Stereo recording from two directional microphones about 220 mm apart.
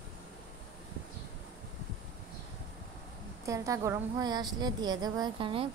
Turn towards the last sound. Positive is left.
turn(degrees=-25)  # may be behind; listen again after turning